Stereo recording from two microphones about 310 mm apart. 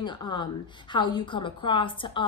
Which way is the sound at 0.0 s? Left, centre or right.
Centre.